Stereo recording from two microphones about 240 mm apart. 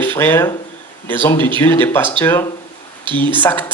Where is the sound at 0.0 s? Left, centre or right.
Centre.